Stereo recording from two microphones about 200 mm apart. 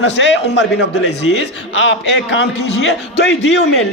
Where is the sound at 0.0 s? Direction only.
65° left (ahead or behind).